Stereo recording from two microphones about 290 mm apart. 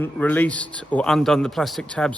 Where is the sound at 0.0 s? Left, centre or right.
Centre.